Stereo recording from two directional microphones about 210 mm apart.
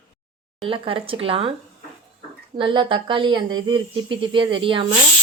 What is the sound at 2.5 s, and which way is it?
A woman's voice, 25° right (ahead or behind).